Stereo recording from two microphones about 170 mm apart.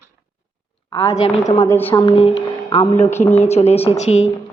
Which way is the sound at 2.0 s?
35° left (ahead or behind).